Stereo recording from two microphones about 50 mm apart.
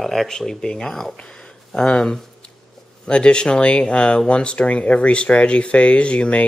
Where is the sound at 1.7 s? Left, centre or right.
Centre.